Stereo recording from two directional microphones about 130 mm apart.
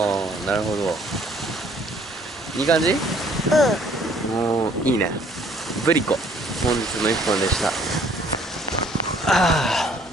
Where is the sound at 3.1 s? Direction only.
Centre (ahead or behind).